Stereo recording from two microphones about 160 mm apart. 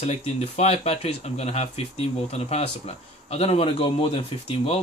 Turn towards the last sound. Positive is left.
turn(degrees=40)  # may be behind; listen again after turning